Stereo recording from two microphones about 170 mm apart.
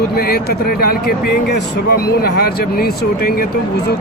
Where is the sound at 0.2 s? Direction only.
65° left (ahead or behind).